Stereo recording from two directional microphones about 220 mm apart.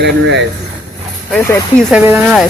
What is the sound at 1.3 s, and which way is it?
Speech, 5° left (ahead or behind).